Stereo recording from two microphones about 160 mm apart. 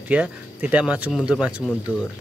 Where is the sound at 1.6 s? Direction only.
15° left (ahead or behind).